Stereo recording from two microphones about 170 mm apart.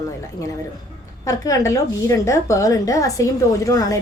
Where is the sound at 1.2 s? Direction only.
20° left (ahead or behind).